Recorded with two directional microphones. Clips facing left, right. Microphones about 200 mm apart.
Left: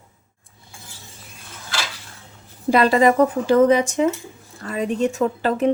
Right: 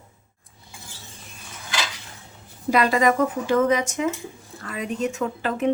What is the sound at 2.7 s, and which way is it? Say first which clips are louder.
Speech: left 4 dB; 30° left (ahead or behind).